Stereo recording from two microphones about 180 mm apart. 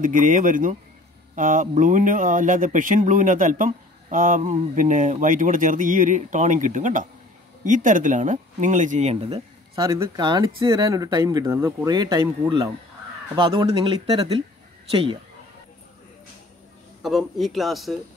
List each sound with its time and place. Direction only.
0.0 s speech: 45° right (ahead or behind)
9.8 s speech: 15° right (ahead or behind)
17.0 s speech: centre (ahead or behind)